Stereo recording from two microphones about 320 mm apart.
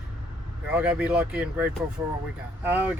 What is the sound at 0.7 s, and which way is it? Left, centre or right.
Speech, centre.